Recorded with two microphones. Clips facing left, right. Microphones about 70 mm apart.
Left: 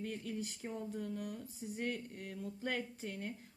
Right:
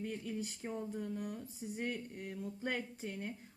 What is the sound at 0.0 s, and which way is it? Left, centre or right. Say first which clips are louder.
Speech: right 1 dB; centre.